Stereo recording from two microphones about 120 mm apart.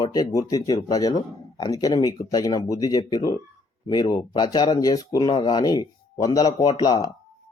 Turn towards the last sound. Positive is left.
turn(degrees=30)  # may be behind; listen again after turning